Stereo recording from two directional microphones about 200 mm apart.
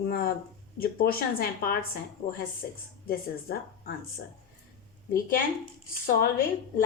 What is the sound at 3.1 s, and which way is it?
Speech, 50° left (ahead or behind).